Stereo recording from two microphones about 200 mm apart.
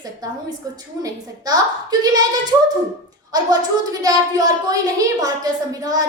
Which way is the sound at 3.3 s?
20° right (ahead or behind).